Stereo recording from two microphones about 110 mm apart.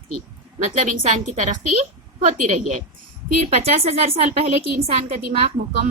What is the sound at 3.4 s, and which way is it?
A woman's voice, 70° right (ahead or behind).